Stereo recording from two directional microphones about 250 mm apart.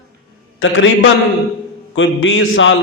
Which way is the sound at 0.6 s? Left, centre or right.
Left.